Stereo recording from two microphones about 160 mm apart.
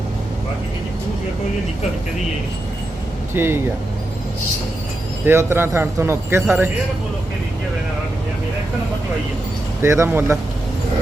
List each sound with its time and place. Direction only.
3.3 s speech: 15° right (ahead or behind)
5.2 s speech: 15° right (ahead or behind)
9.8 s speech: 15° right (ahead or behind)